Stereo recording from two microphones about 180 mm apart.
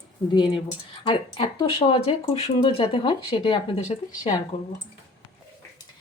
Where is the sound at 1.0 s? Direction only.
30° left (ahead or behind).